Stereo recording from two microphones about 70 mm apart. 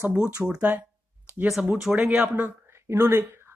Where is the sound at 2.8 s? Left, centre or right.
Right.